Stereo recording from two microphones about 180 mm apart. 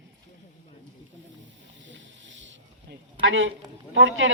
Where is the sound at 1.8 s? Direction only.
90° right.